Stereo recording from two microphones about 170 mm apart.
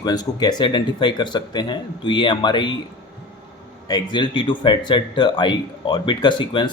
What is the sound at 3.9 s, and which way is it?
Speech, 25° left (ahead or behind).